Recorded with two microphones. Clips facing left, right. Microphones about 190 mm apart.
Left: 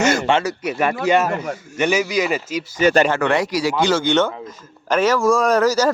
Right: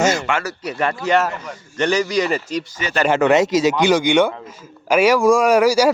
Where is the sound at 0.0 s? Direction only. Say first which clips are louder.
Even; 55° left (ahead or behind).